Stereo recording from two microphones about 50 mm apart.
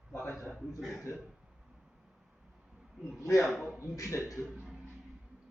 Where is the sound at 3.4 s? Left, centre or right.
Centre.